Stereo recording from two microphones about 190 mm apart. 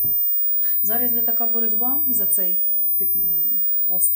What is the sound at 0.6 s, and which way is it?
Speech, 20° left (ahead or behind).